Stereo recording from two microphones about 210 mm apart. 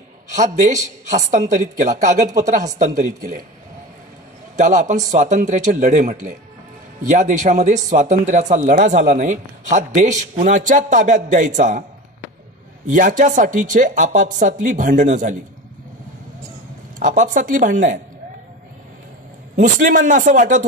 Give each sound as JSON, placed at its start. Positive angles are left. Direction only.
{"t": 0.4, "sound": "speech", "side_deg": -35}
{"t": 4.6, "sound": "speech", "side_deg": -35}
{"t": 12.8, "sound": "speech", "side_deg": -35}
{"t": 17.0, "sound": "speech", "side_deg": -40}
{"t": 19.5, "sound": "speech", "side_deg": -40}